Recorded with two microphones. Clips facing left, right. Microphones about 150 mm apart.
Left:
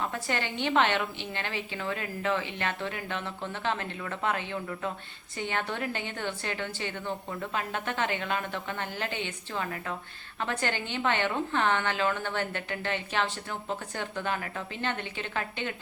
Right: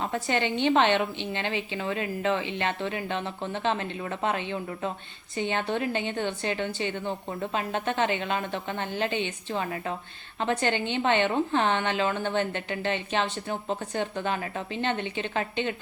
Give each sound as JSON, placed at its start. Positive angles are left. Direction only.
{"t": 0.0, "sound": "a woman's voice", "side_deg": -20}